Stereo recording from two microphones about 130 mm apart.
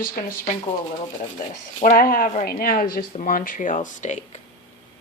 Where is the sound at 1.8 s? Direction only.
90° left; by 4.4 s 65° left (ahead or behind).